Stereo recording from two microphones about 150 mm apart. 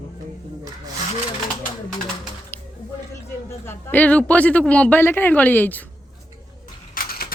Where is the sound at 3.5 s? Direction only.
15° left (ahead or behind).